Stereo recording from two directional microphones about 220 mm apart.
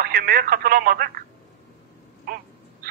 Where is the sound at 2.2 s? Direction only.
45° right (ahead or behind).